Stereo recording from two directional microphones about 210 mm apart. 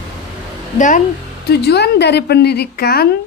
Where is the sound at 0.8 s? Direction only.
35° left (ahead or behind).